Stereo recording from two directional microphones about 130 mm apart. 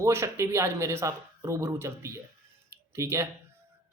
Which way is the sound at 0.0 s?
20° right (ahead or behind).